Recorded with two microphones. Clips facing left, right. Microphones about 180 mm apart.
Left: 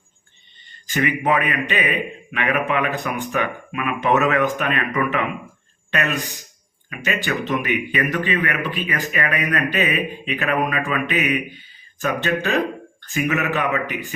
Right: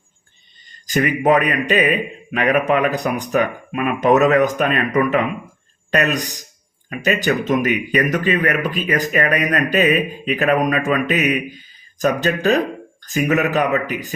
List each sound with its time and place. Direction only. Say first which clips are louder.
0.9 s speech: right 4 dB; 40° right (ahead or behind)